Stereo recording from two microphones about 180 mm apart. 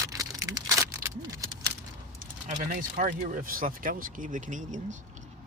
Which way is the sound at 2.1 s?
50° right (ahead or behind).